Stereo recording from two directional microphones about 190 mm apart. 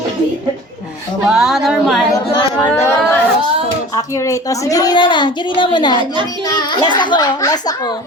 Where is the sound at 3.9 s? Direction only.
15° left (ahead or behind).